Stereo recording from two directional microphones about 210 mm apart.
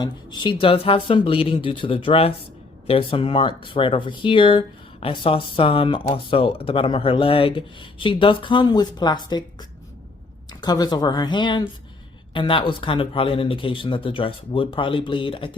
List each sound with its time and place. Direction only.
0.0 s speech: 20° left (ahead or behind)
10.6 s speech: 20° left (ahead or behind)